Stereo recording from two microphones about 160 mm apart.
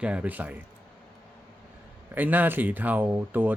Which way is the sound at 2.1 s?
10° right (ahead or behind).